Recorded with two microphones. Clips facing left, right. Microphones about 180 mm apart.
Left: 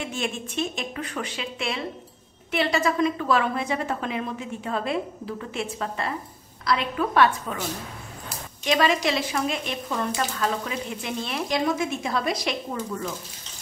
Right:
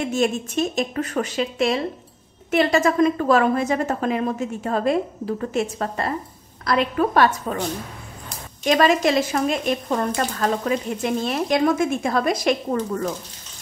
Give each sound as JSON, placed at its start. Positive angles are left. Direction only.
{"t": 0.0, "sound": "speech", "side_deg": -40}
{"t": 8.6, "sound": "speech", "side_deg": -45}